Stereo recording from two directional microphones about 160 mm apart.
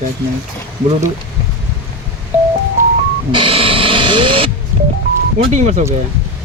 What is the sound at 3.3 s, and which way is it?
Music, 30° right (ahead or behind).